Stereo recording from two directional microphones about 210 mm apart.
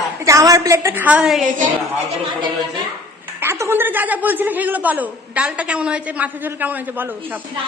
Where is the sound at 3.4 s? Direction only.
10° right (ahead or behind).